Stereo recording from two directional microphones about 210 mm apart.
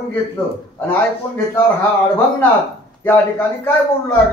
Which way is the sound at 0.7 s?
10° left (ahead or behind).